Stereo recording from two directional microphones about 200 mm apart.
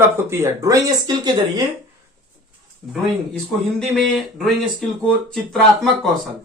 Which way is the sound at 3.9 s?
Centre (ahead or behind).